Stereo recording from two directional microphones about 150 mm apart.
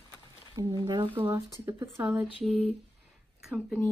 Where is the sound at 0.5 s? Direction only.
25° right (ahead or behind).